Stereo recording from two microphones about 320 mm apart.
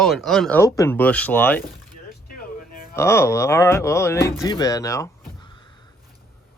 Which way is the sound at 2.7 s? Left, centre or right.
Left.